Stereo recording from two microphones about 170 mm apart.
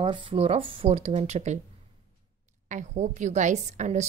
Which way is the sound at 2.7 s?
45° right (ahead or behind).